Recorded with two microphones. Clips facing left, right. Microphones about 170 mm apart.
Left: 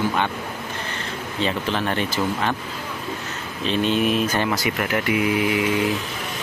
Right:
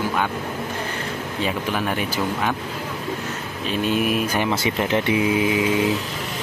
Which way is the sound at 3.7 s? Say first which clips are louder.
Left 1 dB; 5° right (ahead or behind).